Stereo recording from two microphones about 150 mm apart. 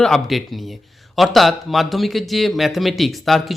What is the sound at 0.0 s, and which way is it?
Speech, centre (ahead or behind).